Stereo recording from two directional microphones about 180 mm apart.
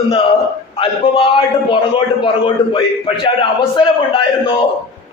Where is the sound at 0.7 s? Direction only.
30° left (ahead or behind).